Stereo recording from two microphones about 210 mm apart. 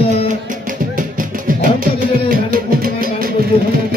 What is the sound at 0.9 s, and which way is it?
Music, 40° right (ahead or behind).